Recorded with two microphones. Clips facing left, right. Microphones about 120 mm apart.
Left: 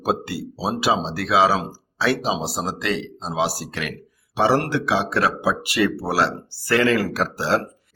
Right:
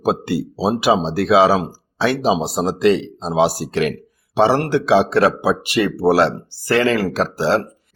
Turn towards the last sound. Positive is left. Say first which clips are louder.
# right 4 dB
turn(degrees=-25)  # may be behind; listen again after turning